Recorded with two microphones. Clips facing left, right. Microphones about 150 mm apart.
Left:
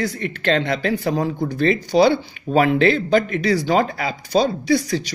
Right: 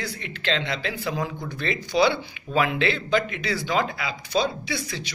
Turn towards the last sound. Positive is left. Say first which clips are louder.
# left 12 dB
turn(degrees=40)  # may be behind; listen again after turning